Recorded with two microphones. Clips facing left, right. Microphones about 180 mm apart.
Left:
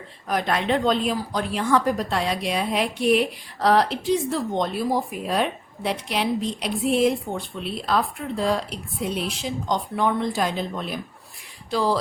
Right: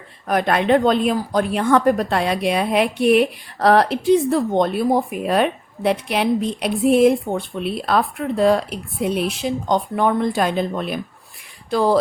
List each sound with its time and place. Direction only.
0.3 s a woman's voice: 55° right (ahead or behind)